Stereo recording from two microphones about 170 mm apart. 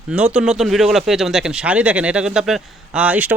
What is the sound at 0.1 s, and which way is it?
Speech, 5° right (ahead or behind).